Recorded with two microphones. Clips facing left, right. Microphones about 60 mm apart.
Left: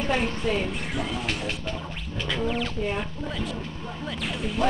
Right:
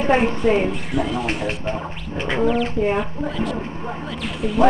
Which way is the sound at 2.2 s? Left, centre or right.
Right.